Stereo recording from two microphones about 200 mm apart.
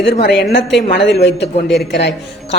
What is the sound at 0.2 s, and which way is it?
A woman's voice, 60° left (ahead or behind).